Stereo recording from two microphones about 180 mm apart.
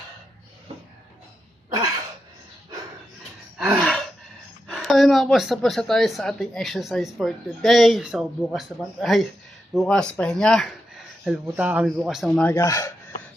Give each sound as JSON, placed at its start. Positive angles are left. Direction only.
{"t": 3.6, "sound": "gasp", "side_deg": 0}
{"t": 4.7, "sound": "a woman's voice", "side_deg": 0}
{"t": 11.3, "sound": "a woman's voice", "side_deg": -10}
{"t": 12.5, "sound": "speech", "side_deg": 15}